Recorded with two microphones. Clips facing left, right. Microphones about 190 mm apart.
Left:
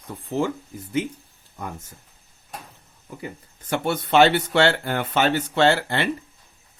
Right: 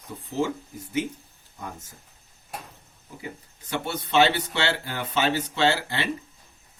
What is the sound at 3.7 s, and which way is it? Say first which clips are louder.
Speech: left 6 dB; 55° left (ahead or behind).